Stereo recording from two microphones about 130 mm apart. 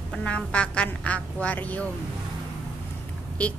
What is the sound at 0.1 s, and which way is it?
Speech, 10° left (ahead or behind).